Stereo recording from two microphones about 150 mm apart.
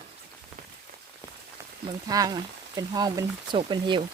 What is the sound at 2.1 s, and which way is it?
Speech, 25° right (ahead or behind).